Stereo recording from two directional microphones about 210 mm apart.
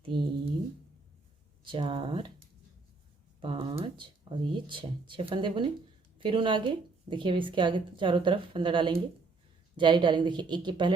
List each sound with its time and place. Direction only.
0.1 s a woman's voice: 25° right (ahead or behind)
1.6 s a woman's voice: 25° right (ahead or behind)
3.4 s a woman's voice: 25° right (ahead or behind)